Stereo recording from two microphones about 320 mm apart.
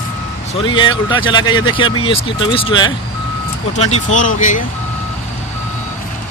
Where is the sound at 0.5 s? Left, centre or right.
Centre.